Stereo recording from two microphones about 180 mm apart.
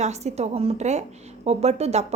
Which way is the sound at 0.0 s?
40° right (ahead or behind).